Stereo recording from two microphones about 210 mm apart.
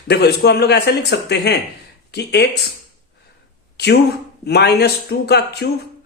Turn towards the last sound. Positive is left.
turn(degrees=50)  # may be behind; listen again after turning